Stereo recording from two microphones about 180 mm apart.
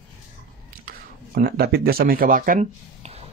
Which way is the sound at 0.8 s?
55° right (ahead or behind).